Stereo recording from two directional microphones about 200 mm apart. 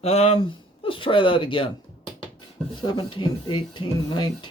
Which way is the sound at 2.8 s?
20° left (ahead or behind).